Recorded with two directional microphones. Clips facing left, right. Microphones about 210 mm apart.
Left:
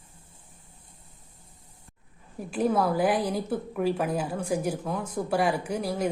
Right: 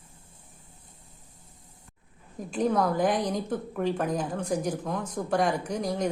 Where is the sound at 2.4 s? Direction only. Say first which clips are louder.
Even; 5° left (ahead or behind).